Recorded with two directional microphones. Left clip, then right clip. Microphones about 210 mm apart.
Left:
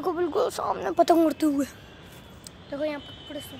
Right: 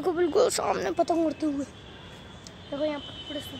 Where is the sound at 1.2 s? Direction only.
30° left (ahead or behind).